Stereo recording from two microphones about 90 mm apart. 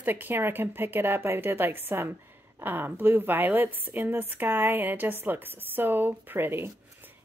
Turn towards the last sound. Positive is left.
turn(degrees=-25)  # may be behind; listen again after turning